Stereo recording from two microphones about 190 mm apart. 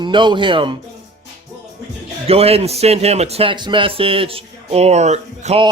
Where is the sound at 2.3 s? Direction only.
30° right (ahead or behind).